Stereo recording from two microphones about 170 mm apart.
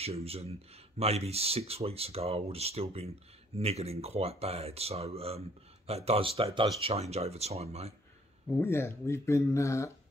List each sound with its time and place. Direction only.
0.0 s speech: 35° right (ahead or behind)
8.5 s speech: 15° left (ahead or behind)